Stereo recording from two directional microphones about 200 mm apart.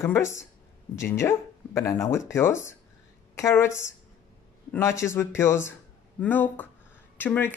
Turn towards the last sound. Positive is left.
turn(degrees=10)  # may be behind; listen again after turning